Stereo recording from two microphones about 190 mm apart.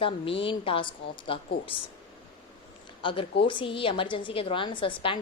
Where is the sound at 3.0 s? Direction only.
25° left (ahead or behind).